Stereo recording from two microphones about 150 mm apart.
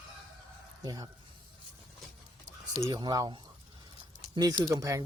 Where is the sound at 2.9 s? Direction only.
25° right (ahead or behind).